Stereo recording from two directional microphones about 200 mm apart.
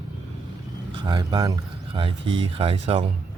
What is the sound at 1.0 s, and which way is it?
Speech, 20° right (ahead or behind).